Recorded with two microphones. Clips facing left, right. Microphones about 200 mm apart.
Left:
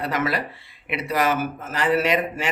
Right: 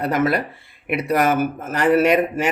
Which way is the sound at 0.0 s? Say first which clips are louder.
Right 5 dB; 55° right (ahead or behind).